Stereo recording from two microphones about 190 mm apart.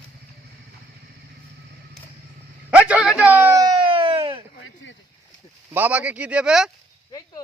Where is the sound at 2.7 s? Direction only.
5° right (ahead or behind); by 4.4 s 30° right (ahead or behind).